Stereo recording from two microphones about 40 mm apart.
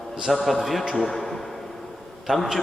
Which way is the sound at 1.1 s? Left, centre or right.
Centre.